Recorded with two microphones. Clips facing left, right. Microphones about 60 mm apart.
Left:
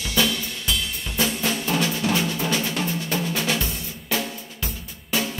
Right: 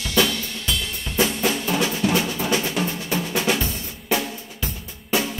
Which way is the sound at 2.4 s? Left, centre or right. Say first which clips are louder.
Right 2 dB; centre.